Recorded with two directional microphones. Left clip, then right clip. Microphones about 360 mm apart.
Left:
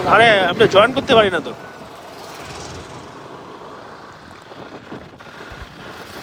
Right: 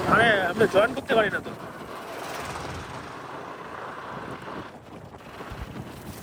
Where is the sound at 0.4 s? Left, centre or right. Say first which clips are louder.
Left 9 dB; left.